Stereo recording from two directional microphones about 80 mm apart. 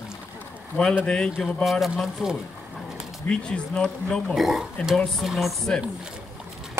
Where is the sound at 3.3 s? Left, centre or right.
Centre.